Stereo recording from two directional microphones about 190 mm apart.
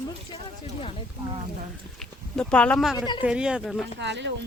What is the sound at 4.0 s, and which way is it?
Speech, 70° right (ahead or behind).